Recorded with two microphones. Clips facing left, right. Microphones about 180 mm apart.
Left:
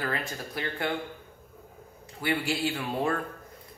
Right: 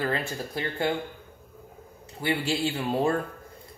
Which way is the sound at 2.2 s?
25° right (ahead or behind).